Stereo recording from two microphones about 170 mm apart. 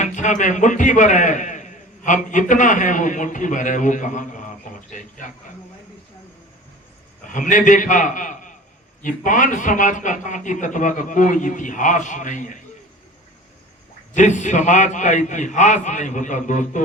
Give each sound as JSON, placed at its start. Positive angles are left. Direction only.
{"t": 0.0, "sound": "a man's voice", "side_deg": 45}
{"t": 7.3, "sound": "a man's voice", "side_deg": 50}
{"t": 14.1, "sound": "a man's voice", "side_deg": 45}